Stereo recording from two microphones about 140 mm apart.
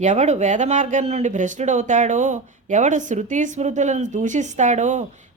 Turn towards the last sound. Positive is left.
turn(degrees=-60)  # may be behind; listen again after turning